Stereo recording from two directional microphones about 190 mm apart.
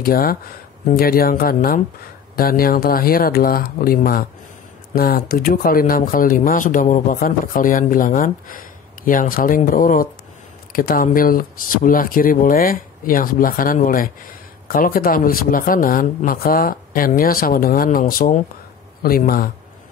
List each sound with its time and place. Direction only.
0.0 s speech: 50° left (ahead or behind)